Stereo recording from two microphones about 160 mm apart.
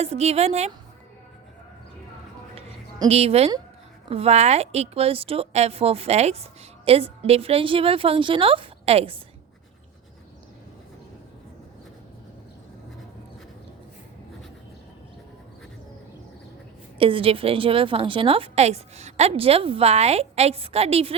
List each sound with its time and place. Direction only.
0.0 s a woman's voice: 40° right (ahead or behind)
3.1 s a woman's voice: 40° right (ahead or behind)
17.0 s a woman's voice: 35° right (ahead or behind)